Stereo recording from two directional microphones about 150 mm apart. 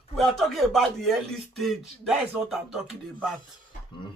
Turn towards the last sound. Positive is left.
turn(degrees=0)  # may be behind; listen again after turning